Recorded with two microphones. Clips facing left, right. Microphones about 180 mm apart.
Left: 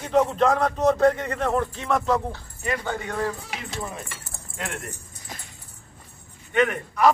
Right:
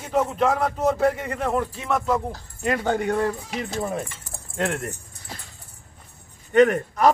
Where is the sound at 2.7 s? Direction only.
60° right (ahead or behind).